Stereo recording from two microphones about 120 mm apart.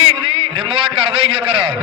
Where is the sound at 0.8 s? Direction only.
50° right (ahead or behind).